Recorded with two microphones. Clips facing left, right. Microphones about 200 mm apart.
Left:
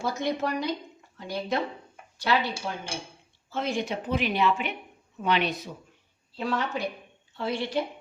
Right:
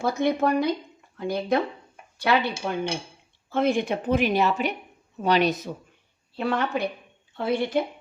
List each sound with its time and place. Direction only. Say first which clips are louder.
0.0 s speech: right 5 dB; 55° right (ahead or behind)
3.5 s a woman's voice: right 6 dB; 55° right (ahead or behind); by 5.7 s 40° right (ahead or behind)
6.3 s speech: right 4 dB; 60° right (ahead or behind)